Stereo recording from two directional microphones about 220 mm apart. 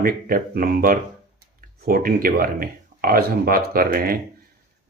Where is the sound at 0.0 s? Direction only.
40° right (ahead or behind).